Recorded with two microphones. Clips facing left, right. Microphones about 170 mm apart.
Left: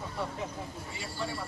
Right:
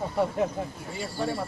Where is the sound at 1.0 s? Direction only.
50° right (ahead or behind).